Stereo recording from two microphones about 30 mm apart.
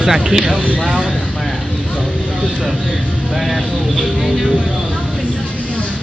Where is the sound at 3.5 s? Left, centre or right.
Centre.